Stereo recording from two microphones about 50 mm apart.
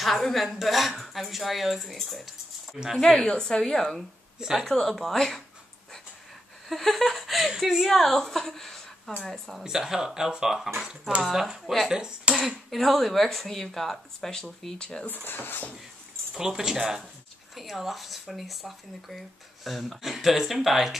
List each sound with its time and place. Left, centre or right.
0.0 s speech: centre
3.0 s a woman's voice: centre
4.4 s speech: centre
4.6 s a woman's voice: centre
6.7 s a woman's voice: centre
9.6 s speech: centre
12.7 s a woman's voice: centre
15.2 s speech: left
16.3 s speech: centre